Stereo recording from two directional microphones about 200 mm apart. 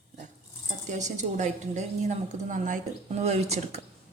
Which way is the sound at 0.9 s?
35° right (ahead or behind).